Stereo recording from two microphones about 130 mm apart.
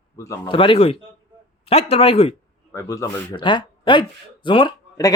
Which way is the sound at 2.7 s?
25° left (ahead or behind).